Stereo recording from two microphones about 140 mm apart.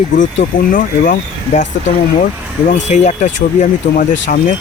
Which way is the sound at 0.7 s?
80° left.